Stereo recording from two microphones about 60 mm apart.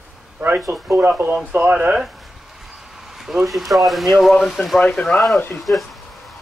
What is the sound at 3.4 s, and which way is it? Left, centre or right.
Speech, centre.